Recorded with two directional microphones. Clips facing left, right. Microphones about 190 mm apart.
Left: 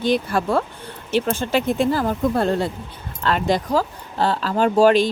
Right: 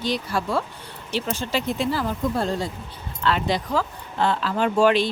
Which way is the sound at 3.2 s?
45° left (ahead or behind).